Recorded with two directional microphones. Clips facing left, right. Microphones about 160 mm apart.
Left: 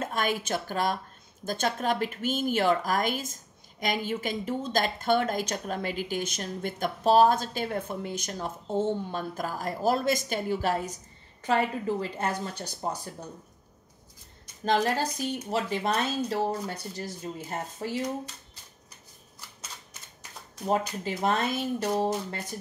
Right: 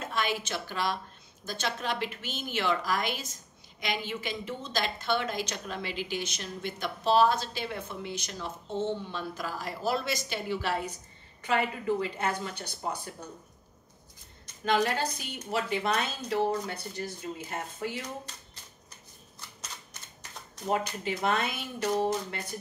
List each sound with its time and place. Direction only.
0.0 s a woman's voice: 45° left (ahead or behind)
14.6 s a woman's voice: 35° left (ahead or behind)
19.9 s camera: 5° left (ahead or behind)
21.0 s speech: 35° left (ahead or behind)